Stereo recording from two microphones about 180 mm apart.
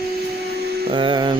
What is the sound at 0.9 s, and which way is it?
Speech, 25° right (ahead or behind).